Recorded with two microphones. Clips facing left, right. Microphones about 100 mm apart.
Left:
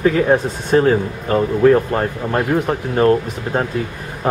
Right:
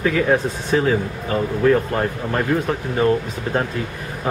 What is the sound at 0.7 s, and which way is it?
Speech, 45° left (ahead or behind).